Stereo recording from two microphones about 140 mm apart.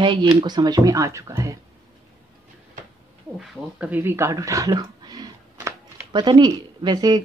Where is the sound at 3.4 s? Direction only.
10° right (ahead or behind); by 7.2 s 30° right (ahead or behind).